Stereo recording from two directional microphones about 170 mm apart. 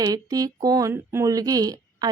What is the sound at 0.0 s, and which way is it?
Speech, 20° right (ahead or behind).